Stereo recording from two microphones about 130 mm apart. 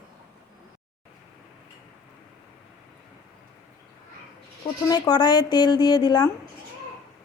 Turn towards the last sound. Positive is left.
turn(degrees=35)  # may be behind; listen again after turning